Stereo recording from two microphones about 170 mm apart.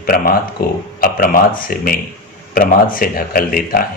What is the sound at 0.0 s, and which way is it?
A man's voice, 60° left (ahead or behind).